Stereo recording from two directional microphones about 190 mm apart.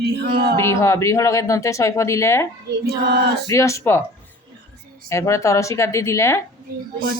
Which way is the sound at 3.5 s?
15° left (ahead or behind).